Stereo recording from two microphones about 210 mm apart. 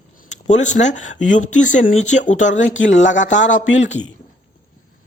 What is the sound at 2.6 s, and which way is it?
Speech, 65° left (ahead or behind).